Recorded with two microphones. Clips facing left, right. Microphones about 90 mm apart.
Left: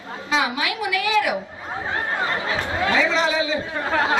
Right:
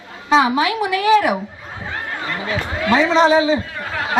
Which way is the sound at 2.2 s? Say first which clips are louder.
Even; 30° left (ahead or behind).